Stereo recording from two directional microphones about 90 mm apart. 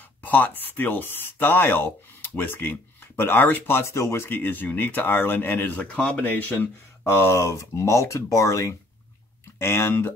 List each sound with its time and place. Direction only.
0.2 s speech: 20° left (ahead or behind)
5.9 s speech: 15° left (ahead or behind)